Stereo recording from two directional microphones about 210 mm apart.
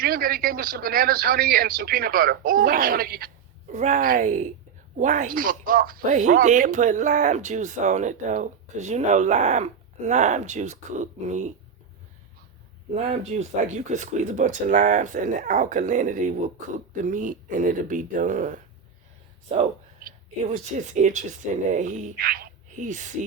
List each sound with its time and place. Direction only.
0.0 s speech: 45° right (ahead or behind)
3.7 s speech: 35° right (ahead or behind)
12.9 s speech: 30° right (ahead or behind)